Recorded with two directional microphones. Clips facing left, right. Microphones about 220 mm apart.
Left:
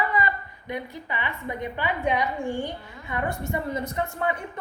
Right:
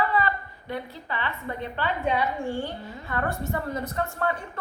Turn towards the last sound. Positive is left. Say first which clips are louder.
# left 1 dB
turn(degrees=15)  # may be behind; listen again after turning